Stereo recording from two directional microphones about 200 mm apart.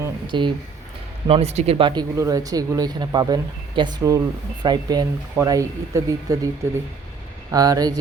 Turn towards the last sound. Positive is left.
turn(degrees=-20)  # may be behind; listen again after turning